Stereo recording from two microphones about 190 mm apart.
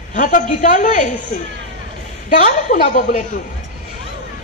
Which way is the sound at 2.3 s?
40° left (ahead or behind).